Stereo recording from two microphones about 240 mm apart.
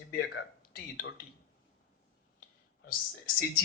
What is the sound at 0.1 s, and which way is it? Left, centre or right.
Speech, left.